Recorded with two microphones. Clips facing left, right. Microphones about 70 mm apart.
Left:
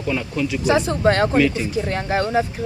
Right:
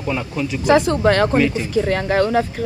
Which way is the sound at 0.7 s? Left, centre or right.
Right.